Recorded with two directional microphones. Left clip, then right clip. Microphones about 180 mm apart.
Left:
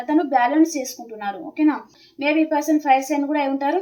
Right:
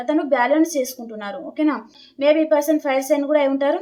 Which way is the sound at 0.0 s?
30° right (ahead or behind).